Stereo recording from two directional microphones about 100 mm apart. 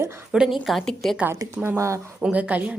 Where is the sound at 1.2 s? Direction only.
20° right (ahead or behind).